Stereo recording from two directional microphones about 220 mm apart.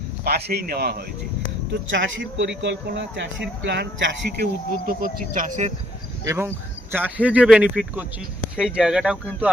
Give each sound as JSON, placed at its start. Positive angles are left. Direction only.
{"t": 0.3, "sound": "a man's voice", "side_deg": -45}
{"t": 1.9, "sound": "speech", "side_deg": -60}
{"t": 4.9, "sound": "speech", "side_deg": -40}
{"t": 6.2, "sound": "speech", "side_deg": -10}